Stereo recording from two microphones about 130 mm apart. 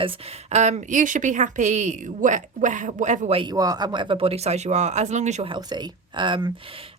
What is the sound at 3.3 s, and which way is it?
Speech, 35° right (ahead or behind).